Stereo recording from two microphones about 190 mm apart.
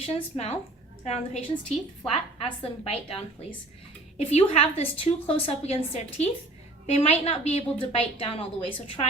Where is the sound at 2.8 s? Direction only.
30° left (ahead or behind).